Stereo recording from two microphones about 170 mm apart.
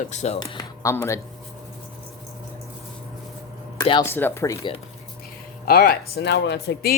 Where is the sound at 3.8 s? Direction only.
30° left (ahead or behind).